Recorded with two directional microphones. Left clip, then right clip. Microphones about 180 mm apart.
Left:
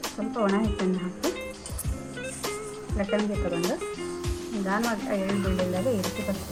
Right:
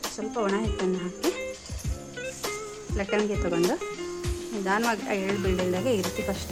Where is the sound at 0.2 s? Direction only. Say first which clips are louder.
Left 1 dB; 35° right (ahead or behind).